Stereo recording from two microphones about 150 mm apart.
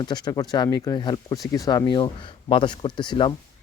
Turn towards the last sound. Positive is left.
turn(degrees=30)  # may be behind; listen again after turning